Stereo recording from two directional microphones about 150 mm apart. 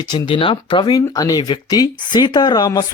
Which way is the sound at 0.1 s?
35° left (ahead or behind).